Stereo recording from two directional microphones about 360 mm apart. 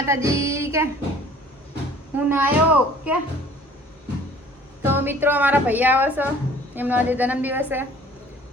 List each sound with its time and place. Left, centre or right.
0.0 s music: centre
2.1 s a woman's voice: centre
4.8 s a woman's voice: centre